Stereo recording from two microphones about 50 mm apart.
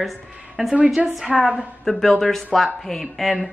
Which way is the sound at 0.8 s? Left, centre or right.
Centre.